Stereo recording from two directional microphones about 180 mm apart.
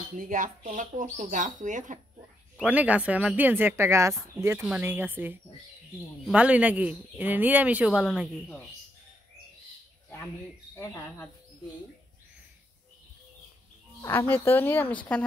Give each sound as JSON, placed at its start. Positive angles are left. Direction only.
{"t": 0.2, "sound": "speech", "side_deg": -45}
{"t": 2.6, "sound": "speech", "side_deg": -10}
{"t": 14.0, "sound": "speech", "side_deg": 10}